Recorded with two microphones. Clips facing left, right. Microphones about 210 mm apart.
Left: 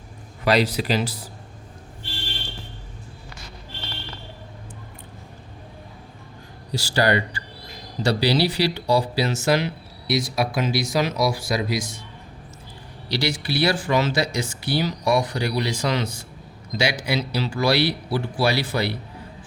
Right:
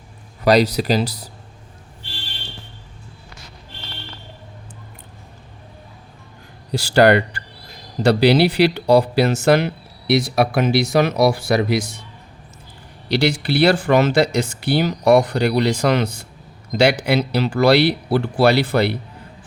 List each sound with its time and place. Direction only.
0.4 s speech: 40° right (ahead or behind)
6.7 s speech: 60° right (ahead or behind)
13.1 s speech: 60° right (ahead or behind)